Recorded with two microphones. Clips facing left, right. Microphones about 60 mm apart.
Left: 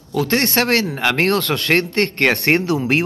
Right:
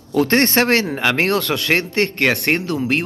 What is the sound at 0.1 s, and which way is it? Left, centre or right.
Speech, right.